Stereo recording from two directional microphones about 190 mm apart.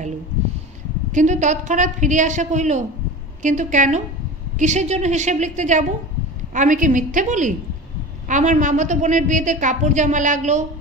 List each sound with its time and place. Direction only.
1.1 s a woman's voice: 40° right (ahead or behind)